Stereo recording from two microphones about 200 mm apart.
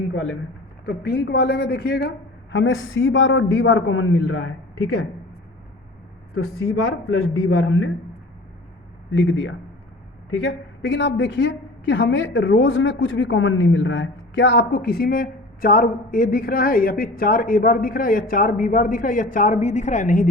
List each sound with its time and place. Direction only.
0.9 s a woman's voice: 60° left (ahead or behind); by 4.5 s 90° left
6.8 s a man's voice: 90° left
9.1 s a woman's voice: 70° left (ahead or behind); by 20.3 s 40° left (ahead or behind)